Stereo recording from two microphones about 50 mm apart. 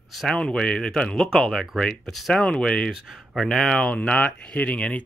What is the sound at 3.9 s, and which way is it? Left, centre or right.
Speech, left.